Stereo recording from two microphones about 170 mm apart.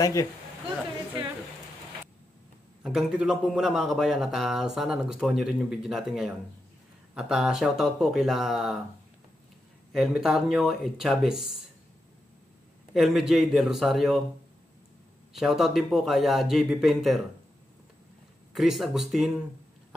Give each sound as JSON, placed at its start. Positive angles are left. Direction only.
{"t": 0.0, "sound": "a woman's voice", "side_deg": 20}
{"t": 2.8, "sound": "a man's voice", "side_deg": -5}
{"t": 9.9, "sound": "a man's voice", "side_deg": 0}
{"t": 12.9, "sound": "a man's voice", "side_deg": 0}
{"t": 15.3, "sound": "a man's voice", "side_deg": 0}
{"t": 18.5, "sound": "a man's voice", "side_deg": 0}